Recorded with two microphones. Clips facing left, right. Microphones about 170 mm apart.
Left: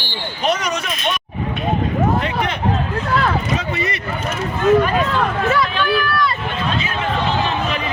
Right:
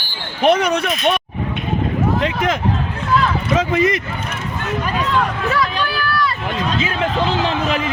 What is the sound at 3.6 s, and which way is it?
Speech, 90° right.